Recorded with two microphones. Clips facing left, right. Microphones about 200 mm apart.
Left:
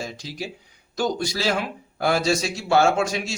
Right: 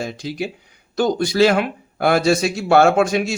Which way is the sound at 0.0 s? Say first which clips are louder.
Right 7 dB; 60° right (ahead or behind).